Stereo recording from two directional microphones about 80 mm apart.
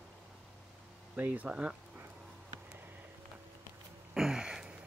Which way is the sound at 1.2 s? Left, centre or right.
Right.